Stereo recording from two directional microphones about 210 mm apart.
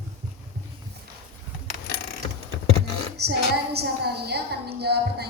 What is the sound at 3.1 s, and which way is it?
A woman's voice, 50° right (ahead or behind).